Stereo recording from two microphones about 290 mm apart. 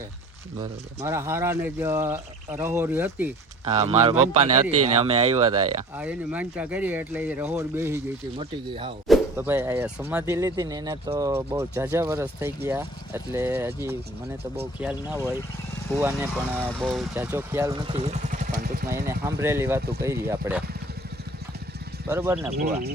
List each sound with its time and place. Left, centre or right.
0.6 s speech: centre
3.7 s speech: right
6.0 s speech: centre
9.0 s speech: centre; by 18.9 s right
19.0 s speech: centre
22.1 s speech: centre